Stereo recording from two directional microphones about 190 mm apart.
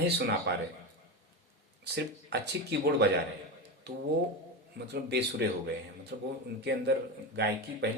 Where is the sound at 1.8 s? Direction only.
60° right (ahead or behind).